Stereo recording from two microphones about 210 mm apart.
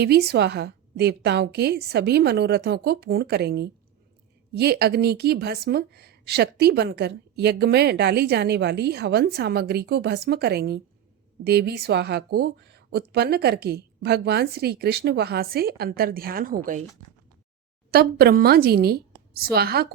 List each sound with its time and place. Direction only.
0.0 s a woman's voice: 50° right (ahead or behind)
17.9 s a woman's voice: 45° right (ahead or behind)